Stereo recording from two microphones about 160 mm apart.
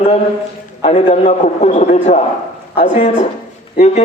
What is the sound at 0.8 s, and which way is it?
A man's voice, 40° left (ahead or behind).